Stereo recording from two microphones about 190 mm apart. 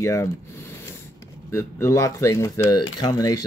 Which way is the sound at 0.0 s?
15° left (ahead or behind).